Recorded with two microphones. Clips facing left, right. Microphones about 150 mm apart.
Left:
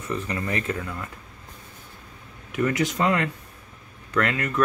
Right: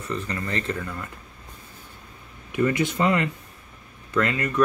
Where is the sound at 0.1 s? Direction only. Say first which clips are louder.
Left 1 dB; 15° left (ahead or behind).